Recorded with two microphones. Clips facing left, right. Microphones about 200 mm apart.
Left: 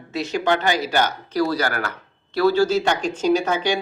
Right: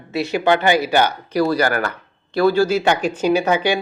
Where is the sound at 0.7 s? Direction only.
60° right (ahead or behind).